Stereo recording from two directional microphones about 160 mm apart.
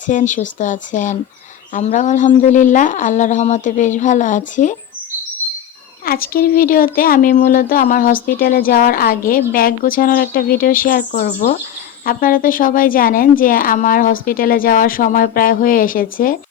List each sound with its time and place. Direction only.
0.1 s a woman's voice: 50° left (ahead or behind)
6.1 s speech: 65° left (ahead or behind)